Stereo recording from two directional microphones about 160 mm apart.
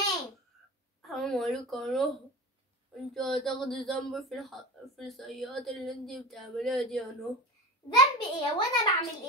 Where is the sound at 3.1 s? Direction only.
Centre (ahead or behind).